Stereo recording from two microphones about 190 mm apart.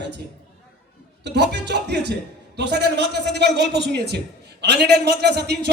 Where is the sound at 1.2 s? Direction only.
65° right (ahead or behind).